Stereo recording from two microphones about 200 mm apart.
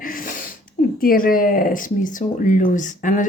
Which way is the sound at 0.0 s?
45° left (ahead or behind).